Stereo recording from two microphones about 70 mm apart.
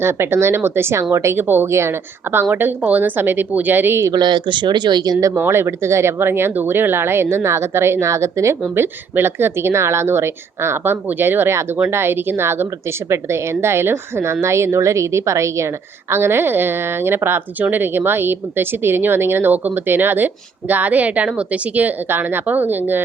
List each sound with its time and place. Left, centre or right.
0.0 s a woman's voice: right
4.1 s speech: right
5.5 s a woman's voice: right